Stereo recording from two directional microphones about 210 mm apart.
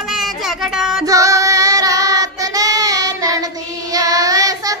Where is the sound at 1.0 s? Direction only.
15° right (ahead or behind).